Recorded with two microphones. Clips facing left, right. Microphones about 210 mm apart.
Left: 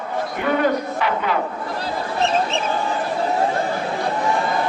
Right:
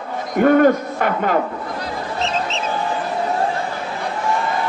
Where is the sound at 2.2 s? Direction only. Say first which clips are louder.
Left 4 dB; 55° left (ahead or behind).